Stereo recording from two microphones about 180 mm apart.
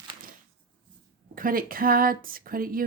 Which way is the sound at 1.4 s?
50° right (ahead or behind).